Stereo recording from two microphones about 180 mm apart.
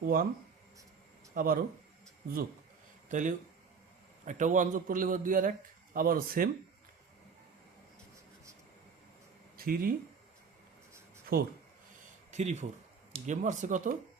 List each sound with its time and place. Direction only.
0.0 s a man's voice: 50° right (ahead or behind)
1.3 s speech: 50° right (ahead or behind)
3.1 s a man's voice: 45° right (ahead or behind)
9.6 s speech: 55° right (ahead or behind)
11.3 s speech: 55° right (ahead or behind)
12.3 s a man's voice: 40° right (ahead or behind)